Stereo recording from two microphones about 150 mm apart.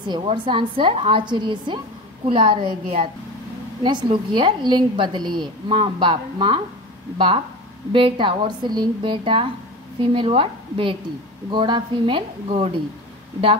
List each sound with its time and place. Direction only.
0.0 s a woman's voice: 30° right (ahead or behind)